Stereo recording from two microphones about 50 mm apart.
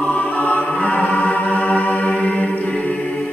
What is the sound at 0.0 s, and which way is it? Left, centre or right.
Music, left.